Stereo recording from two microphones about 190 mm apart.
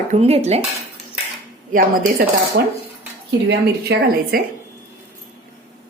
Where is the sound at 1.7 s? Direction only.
45° right (ahead or behind).